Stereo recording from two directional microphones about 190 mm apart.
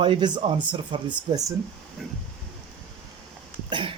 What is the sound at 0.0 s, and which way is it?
Speech, 25° right (ahead or behind).